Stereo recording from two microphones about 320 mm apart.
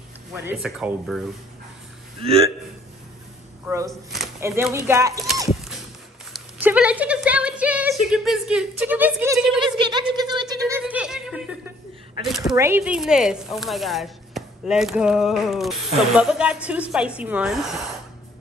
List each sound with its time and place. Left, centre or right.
0.3 s speech: centre
2.2 s speech: centre
3.6 s speech: centre
6.3 s a sound: centre
12.3 s speech: centre